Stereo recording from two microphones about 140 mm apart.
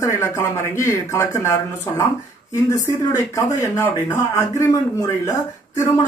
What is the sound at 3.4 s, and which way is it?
Speech, 20° left (ahead or behind).